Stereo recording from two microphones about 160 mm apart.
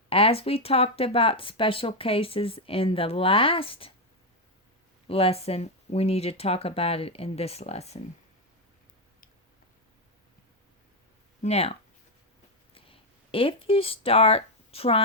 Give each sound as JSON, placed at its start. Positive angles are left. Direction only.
{"t": 0.1, "sound": "speech", "side_deg": 35}
{"t": 5.0, "sound": "speech", "side_deg": 35}
{"t": 11.4, "sound": "speech", "side_deg": 40}